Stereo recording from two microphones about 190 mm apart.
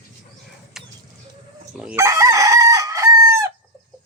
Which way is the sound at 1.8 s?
10° right (ahead or behind).